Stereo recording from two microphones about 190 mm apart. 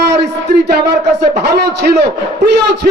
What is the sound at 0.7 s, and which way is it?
A man's voice, 60° right (ahead or behind).